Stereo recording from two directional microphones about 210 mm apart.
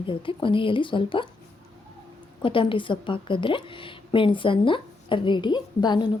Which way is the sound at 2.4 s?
25° left (ahead or behind).